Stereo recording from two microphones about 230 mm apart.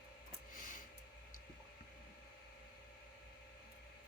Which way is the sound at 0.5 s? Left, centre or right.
Left.